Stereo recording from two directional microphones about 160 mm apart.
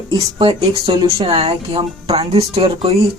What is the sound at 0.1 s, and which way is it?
Speech, 30° right (ahead or behind).